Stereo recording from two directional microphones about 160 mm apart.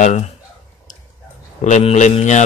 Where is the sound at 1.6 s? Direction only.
45° left (ahead or behind).